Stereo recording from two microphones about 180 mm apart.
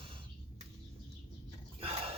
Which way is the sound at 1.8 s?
35° right (ahead or behind).